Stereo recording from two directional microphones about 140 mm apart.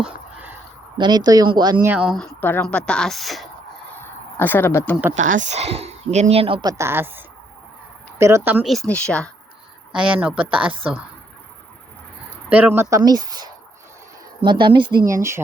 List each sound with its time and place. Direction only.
0.9 s speech: 30° right (ahead or behind)
1.8 s speech: 10° right (ahead or behind)
3.8 s a sound: 15° left (ahead or behind)
5.4 s speech: 50° right (ahead or behind)
6.6 s speech: 25° right (ahead or behind)
8.6 s speech: centre (ahead or behind)
9.9 s speech: 5° right (ahead or behind)
10.7 s speech: 40° right (ahead or behind)
12.5 s speech: 15° right (ahead or behind); by 15.0 s 35° right (ahead or behind)
15.0 s speech: 20° right (ahead or behind)